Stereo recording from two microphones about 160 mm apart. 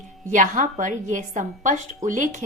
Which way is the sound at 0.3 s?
55° right (ahead or behind).